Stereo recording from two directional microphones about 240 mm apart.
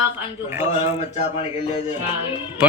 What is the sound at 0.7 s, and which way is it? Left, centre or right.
Speech, left.